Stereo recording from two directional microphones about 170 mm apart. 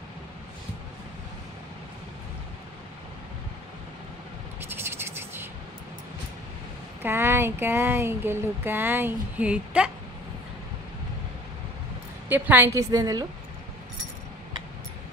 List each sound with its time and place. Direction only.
4.6 s scratch: 15° right (ahead or behind)
7.0 s speech: 15° right (ahead or behind)
12.3 s speech: 10° right (ahead or behind)